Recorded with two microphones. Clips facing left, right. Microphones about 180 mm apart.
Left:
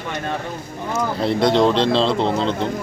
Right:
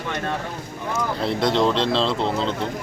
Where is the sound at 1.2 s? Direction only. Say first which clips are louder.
Left 4 dB; centre (ahead or behind).